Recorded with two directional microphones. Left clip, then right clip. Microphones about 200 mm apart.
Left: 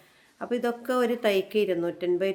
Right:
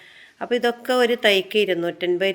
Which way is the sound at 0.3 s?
10° right (ahead or behind).